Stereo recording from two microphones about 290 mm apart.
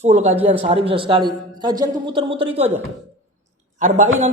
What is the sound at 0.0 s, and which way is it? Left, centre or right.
A woman's voice, right.